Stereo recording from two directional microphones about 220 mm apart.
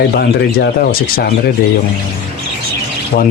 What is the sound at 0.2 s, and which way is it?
Speech, 45° left (ahead or behind).